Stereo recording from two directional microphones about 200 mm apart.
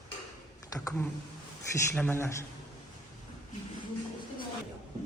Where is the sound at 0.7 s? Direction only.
15° left (ahead or behind).